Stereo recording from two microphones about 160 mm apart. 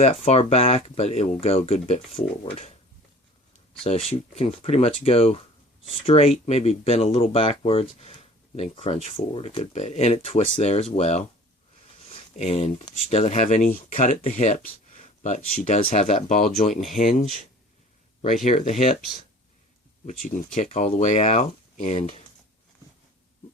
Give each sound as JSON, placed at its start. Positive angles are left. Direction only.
{"t": 0.0, "sound": "speech", "side_deg": 40}
{"t": 3.8, "sound": "speech", "side_deg": 40}
{"t": 12.3, "sound": "speech", "side_deg": 45}
{"t": 18.4, "sound": "speech", "side_deg": 45}
{"t": 20.1, "sound": "speech", "side_deg": 55}